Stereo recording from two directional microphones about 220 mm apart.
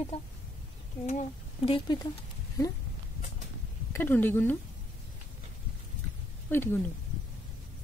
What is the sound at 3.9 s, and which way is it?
Speech, 10° left (ahead or behind).